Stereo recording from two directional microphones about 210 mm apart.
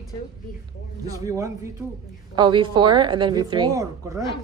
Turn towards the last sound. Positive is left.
turn(degrees=-15)  # may be behind; listen again after turning